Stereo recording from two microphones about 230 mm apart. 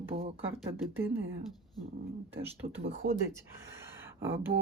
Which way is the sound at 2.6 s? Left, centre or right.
Right.